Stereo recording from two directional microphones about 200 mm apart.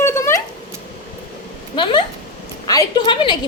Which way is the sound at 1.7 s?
25° left (ahead or behind).